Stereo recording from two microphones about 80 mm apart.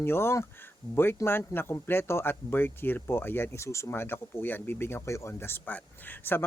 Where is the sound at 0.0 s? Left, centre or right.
Left.